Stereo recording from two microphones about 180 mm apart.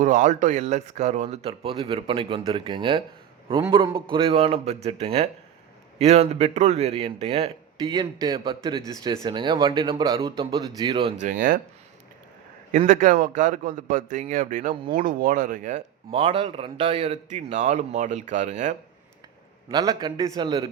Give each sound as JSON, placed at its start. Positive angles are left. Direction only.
{"t": 0.0, "sound": "speech", "side_deg": -45}
{"t": 11.2, "sound": "a man's voice", "side_deg": -45}
{"t": 12.7, "sound": "a man's voice", "side_deg": -45}
{"t": 16.2, "sound": "speech", "side_deg": -30}
{"t": 19.6, "sound": "speech", "side_deg": -20}